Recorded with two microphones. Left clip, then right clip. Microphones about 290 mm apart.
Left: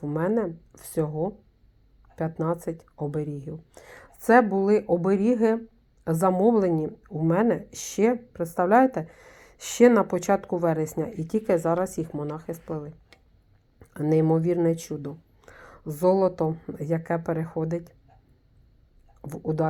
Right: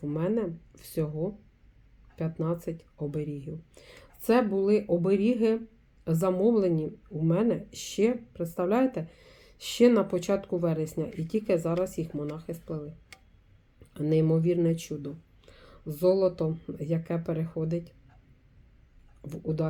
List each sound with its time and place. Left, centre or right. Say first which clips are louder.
0.0 s speech: left 4 dB; left
13.9 s speech: left 4 dB; left
19.2 s speech: left 5 dB; left